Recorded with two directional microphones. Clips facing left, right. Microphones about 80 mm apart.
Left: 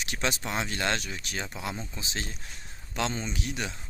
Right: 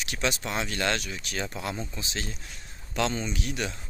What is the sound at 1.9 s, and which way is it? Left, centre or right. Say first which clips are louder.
Speech: right 1 dB; left.